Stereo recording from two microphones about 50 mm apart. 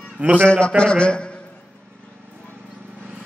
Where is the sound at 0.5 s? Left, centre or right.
Centre.